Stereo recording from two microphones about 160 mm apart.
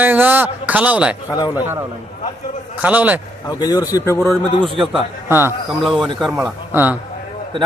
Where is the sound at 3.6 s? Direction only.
25° left (ahead or behind).